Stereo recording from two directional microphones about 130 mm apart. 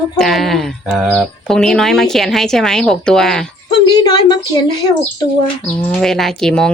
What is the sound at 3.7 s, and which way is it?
A woman's voice, 35° left (ahead or behind).